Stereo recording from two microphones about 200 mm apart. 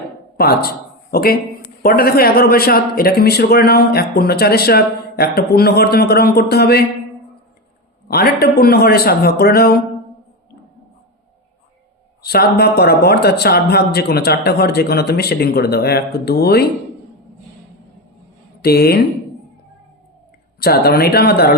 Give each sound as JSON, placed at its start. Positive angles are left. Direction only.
{"t": 0.3, "sound": "speech", "side_deg": 50}
{"t": 8.0, "sound": "speech", "side_deg": 50}
{"t": 12.2, "sound": "speech", "side_deg": 50}
{"t": 18.6, "sound": "speech", "side_deg": 50}
{"t": 20.6, "sound": "speech", "side_deg": 50}